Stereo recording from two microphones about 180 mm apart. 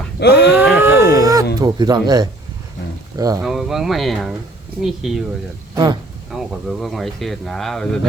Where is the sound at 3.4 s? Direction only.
Centre (ahead or behind).